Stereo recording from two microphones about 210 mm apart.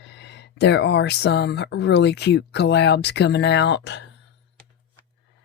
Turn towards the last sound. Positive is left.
turn(degrees=55)  # may be behind; listen again after turning